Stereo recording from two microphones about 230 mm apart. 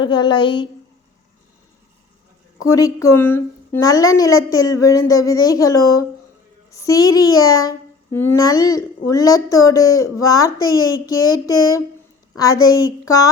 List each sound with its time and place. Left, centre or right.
0.0 s a woman's voice: centre
2.6 s a child's voice: centre